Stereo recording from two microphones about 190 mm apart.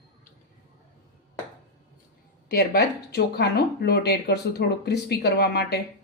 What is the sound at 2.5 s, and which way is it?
Speech, 55° left (ahead or behind).